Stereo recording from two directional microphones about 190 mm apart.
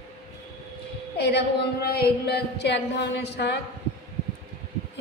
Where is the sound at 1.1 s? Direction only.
60° left (ahead or behind).